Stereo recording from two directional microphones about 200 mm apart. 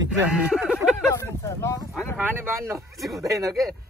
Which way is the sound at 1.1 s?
15° left (ahead or behind).